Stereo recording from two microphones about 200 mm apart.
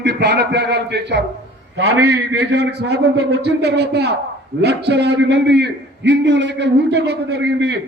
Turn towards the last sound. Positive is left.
turn(degrees=-55)  # may be behind; listen again after turning